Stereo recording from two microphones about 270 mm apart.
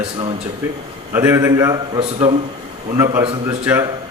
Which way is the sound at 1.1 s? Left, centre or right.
Centre.